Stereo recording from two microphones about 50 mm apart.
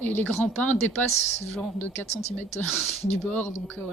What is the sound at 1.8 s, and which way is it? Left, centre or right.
Speech, left.